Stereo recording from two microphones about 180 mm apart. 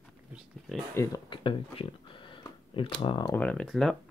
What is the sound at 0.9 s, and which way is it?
Speech, 20° left (ahead or behind).